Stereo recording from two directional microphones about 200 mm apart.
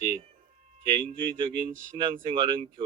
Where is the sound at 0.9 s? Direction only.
25° right (ahead or behind).